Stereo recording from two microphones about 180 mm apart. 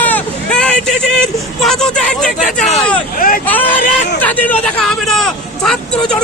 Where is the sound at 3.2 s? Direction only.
50° left (ahead or behind).